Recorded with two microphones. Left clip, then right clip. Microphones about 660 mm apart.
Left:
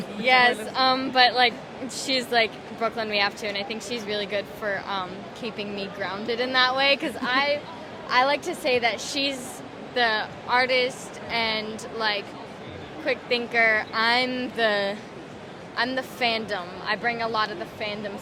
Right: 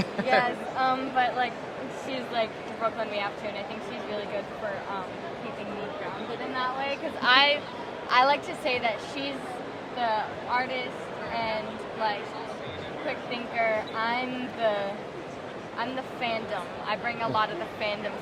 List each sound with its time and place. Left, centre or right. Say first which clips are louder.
0.8 s speech: left 5 dB; left
6.5 s speech: left 9 dB; left
7.2 s a woman's voice: right 3 dB; left
13.1 s a woman's voice: left 9 dB; left